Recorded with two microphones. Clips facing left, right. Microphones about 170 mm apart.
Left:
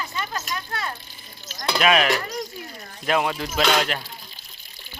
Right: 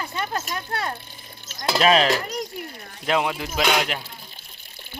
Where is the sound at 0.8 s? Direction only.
55° right (ahead or behind).